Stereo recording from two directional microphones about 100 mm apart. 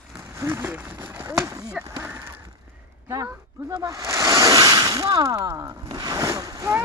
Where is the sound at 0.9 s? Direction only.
25° right (ahead or behind).